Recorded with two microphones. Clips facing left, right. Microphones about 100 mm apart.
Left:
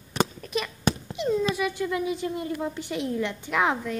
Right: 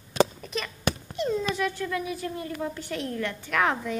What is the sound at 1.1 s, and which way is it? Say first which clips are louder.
Speech: left 2 dB; 10° left (ahead or behind).